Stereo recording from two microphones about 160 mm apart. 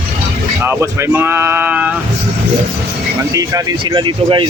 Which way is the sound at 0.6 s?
15° right (ahead or behind).